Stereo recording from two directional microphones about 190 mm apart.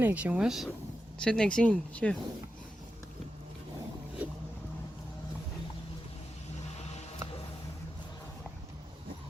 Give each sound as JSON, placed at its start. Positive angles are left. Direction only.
{"t": 0.0, "sound": "speech", "side_deg": -10}